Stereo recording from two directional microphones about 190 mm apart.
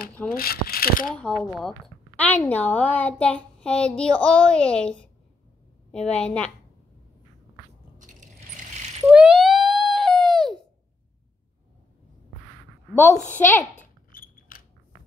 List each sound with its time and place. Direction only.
0.3 s speech: 50° left (ahead or behind)
1.0 s a woman's voice: 5° left (ahead or behind)
8.0 s coin: 40° right (ahead or behind)
9.0 s a sound: 5° right (ahead or behind)
12.9 s a woman's voice: 15° left (ahead or behind)
14.1 s a sound: 50° left (ahead or behind)